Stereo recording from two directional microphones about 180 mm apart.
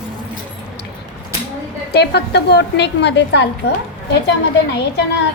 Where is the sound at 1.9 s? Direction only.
65° left (ahead or behind).